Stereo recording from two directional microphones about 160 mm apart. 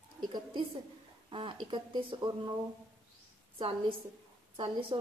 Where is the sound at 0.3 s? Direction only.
30° right (ahead or behind).